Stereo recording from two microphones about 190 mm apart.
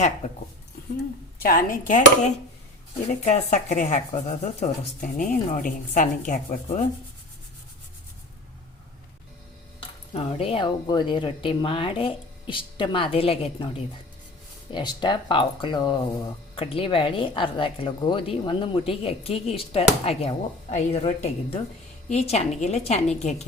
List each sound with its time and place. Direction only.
1.4 s a woman's voice: 50° left (ahead or behind)
10.2 s a woman's voice: 30° left (ahead or behind)